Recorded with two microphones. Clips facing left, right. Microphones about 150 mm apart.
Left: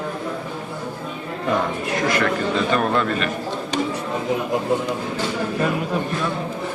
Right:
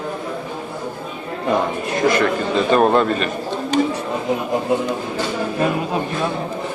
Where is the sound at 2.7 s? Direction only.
30° right (ahead or behind).